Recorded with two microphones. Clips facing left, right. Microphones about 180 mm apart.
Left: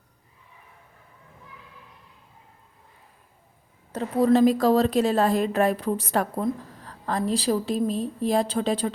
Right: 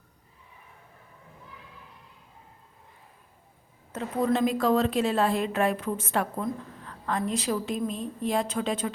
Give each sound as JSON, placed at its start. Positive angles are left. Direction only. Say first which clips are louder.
{"t": 3.9, "sound": "a woman's voice", "louder": "left 6 dB", "side_deg": 35}